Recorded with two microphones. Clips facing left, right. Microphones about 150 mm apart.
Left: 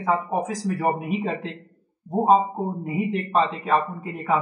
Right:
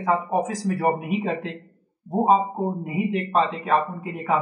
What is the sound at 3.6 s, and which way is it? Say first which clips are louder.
Speech: even; 5° right (ahead or behind).